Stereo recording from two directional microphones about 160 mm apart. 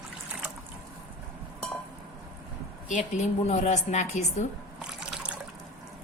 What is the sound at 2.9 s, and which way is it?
A woman's voice, 45° left (ahead or behind).